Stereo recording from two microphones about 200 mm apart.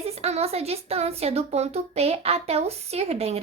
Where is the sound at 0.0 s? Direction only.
30° right (ahead or behind).